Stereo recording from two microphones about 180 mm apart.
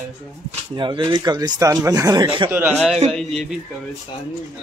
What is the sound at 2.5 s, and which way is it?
Speech, 10° right (ahead or behind).